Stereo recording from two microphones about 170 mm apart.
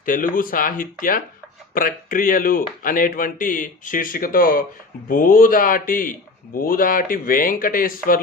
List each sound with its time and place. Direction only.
0.0 s speech: 55° left (ahead or behind)